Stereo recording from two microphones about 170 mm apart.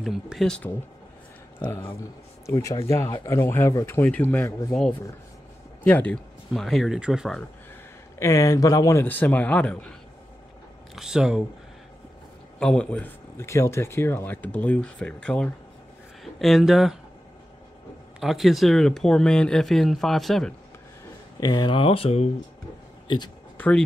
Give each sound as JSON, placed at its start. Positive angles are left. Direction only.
{"t": 0.0, "sound": "speech", "side_deg": 0}
{"t": 2.4, "sound": "speech", "side_deg": 20}
{"t": 5.9, "sound": "speech", "side_deg": 10}
{"t": 8.2, "sound": "speech", "side_deg": 15}
{"t": 11.0, "sound": "speech", "side_deg": -5}
{"t": 12.5, "sound": "speech", "side_deg": 5}
{"t": 18.2, "sound": "speech", "side_deg": 0}
{"t": 21.4, "sound": "speech", "side_deg": 25}
{"t": 23.0, "sound": "speech", "side_deg": 25}